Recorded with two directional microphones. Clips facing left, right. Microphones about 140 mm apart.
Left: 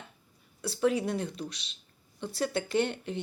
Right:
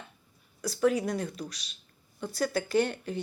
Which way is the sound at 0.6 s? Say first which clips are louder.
Right 1 dB; 30° left (ahead or behind).